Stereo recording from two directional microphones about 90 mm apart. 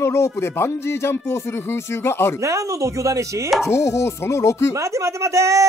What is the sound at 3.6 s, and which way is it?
Music, 30° left (ahead or behind).